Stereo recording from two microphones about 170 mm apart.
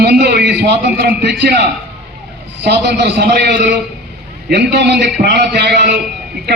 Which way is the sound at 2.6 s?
80° right.